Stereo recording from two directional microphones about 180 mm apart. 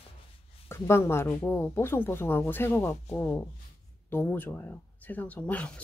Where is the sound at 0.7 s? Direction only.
15° left (ahead or behind).